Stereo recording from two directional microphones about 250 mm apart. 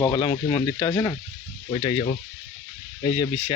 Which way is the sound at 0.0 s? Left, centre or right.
Centre.